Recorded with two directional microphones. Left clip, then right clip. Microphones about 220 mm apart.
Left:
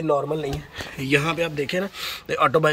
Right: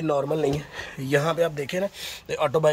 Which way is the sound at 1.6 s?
10° right (ahead or behind).